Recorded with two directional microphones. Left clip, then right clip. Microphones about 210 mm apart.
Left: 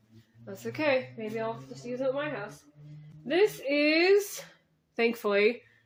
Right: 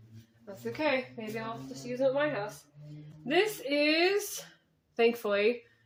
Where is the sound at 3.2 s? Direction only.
35° left (ahead or behind).